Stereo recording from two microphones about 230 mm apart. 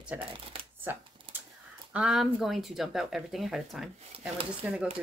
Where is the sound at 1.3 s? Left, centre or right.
Right.